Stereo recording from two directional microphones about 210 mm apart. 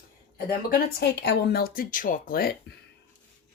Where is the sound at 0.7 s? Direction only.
50° left (ahead or behind).